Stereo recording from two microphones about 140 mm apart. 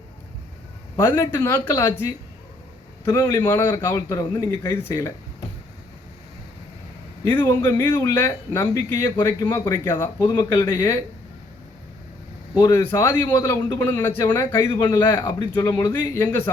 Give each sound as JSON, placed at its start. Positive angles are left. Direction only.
{"t": 1.0, "sound": "speech", "side_deg": 15}
{"t": 3.0, "sound": "speech", "side_deg": 15}
{"t": 3.6, "sound": "a man's voice", "side_deg": 30}
{"t": 7.3, "sound": "a man's voice", "side_deg": 15}
{"t": 12.5, "sound": "a man's voice", "side_deg": 20}
{"t": 15.0, "sound": "a man's voice", "side_deg": 30}
{"t": 15.5, "sound": "speech", "side_deg": 15}